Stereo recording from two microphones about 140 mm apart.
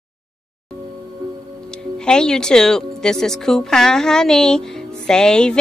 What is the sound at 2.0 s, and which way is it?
A woman's voice, 5° left (ahead or behind).